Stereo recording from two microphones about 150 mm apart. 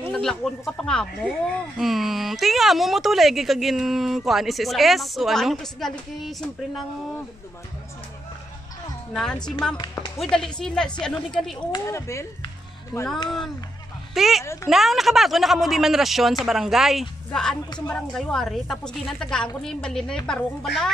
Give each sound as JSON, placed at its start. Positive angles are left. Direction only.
{"t": 0.1, "sound": "speech", "side_deg": 5}
{"t": 9.1, "sound": "speech", "side_deg": 5}
{"t": 11.7, "sound": "speech", "side_deg": 20}
{"t": 12.9, "sound": "speech", "side_deg": 0}
{"t": 14.1, "sound": "speech", "side_deg": 0}
{"t": 14.4, "sound": "speech", "side_deg": 20}
{"t": 14.7, "sound": "speech", "side_deg": 0}